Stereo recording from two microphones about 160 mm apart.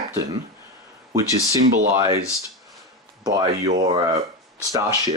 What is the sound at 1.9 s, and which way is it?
Speech, 20° right (ahead or behind).